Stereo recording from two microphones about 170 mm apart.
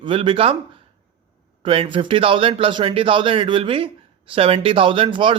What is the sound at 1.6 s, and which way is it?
A man's voice, 30° right (ahead or behind).